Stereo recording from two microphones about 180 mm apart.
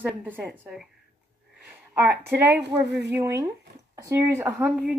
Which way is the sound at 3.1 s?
15° right (ahead or behind).